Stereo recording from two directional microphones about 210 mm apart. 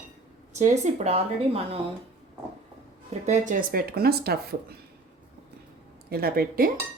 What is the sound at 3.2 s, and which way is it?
Speech, 35° right (ahead or behind).